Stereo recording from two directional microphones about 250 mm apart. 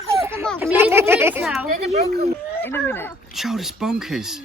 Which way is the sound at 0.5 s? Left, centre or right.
Centre.